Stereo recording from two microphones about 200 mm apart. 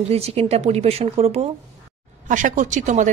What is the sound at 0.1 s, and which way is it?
A woman's voice, 30° right (ahead or behind).